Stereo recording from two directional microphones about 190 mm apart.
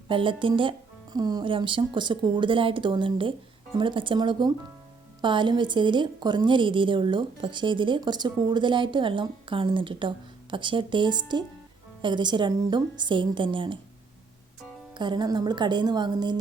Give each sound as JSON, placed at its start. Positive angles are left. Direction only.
{"t": 0.1, "sound": "a woman's voice", "side_deg": -25}
{"t": 14.9, "sound": "a woman's voice", "side_deg": -25}